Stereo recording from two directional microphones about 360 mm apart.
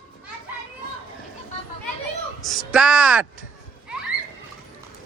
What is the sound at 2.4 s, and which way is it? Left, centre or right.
Speech, centre.